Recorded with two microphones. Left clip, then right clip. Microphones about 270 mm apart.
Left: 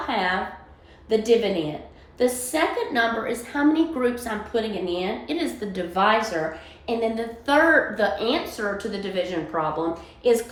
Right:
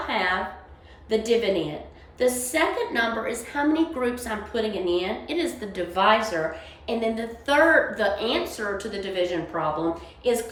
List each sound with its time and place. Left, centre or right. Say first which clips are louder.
0.1 s a woman's voice: left 1 dB; centre